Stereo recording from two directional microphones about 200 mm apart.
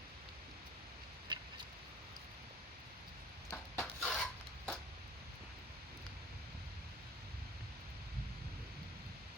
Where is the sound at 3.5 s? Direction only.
5° left (ahead or behind).